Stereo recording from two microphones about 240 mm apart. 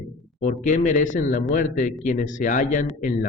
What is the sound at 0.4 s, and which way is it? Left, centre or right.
A man's voice, left.